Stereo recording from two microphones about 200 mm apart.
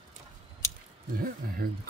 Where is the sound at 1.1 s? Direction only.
50° right (ahead or behind).